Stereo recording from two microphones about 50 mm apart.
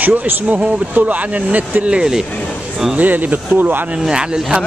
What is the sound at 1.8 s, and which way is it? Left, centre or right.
Speech, centre.